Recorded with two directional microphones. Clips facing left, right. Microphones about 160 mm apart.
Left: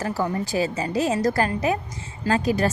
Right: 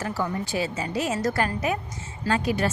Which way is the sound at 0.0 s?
40° left (ahead or behind).